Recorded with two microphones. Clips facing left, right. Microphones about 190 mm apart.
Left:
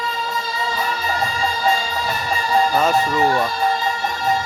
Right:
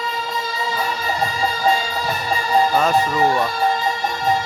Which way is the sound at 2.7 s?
Centre (ahead or behind).